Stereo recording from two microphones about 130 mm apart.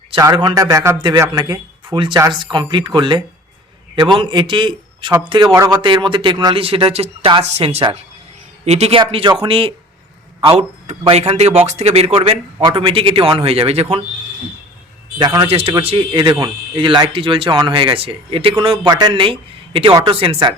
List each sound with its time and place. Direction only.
0.5 s a man's voice: 25° right (ahead or behind); by 9.0 s 55° right (ahead or behind)
9.0 s a man's voice: 40° right (ahead or behind)
15.2 s speech: 35° right (ahead or behind)
15.4 s a man's voice: 50° right (ahead or behind)